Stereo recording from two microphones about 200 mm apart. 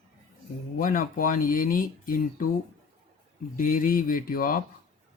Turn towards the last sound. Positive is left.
turn(degrees=45)  # may be behind; listen again after turning